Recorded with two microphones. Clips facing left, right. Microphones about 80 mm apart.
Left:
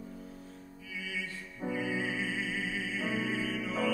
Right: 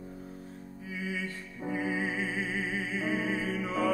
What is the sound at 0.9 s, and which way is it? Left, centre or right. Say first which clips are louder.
Music: right 4 dB; right.